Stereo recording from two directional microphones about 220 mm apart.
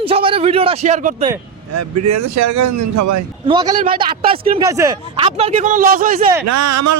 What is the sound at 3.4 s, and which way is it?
Speech, 20° right (ahead or behind).